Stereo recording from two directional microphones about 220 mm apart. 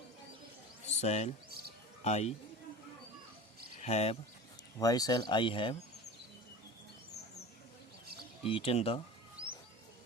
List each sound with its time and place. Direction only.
0.9 s a sound: 30° left (ahead or behind)
1.5 s music: 45° right (ahead or behind)
2.0 s speech: 30° left (ahead or behind)
3.8 s speech: 30° left (ahead or behind)
4.8 s speech: 15° left (ahead or behind)
8.4 s speech: 25° left (ahead or behind)